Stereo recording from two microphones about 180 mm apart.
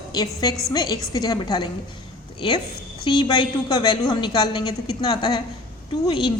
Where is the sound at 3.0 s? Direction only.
25° left (ahead or behind).